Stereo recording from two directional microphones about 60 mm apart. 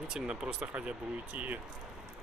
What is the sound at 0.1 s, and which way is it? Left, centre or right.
Speech, centre.